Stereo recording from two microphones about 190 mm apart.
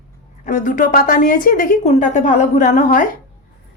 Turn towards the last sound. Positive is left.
turn(degrees=40)  # may be behind; listen again after turning